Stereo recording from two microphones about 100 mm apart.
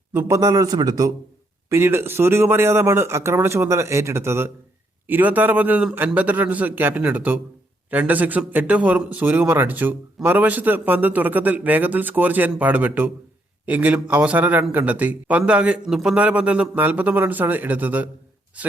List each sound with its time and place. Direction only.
0.1 s a man's voice: 30° right (ahead or behind)
1.7 s a man's voice: 25° right (ahead or behind)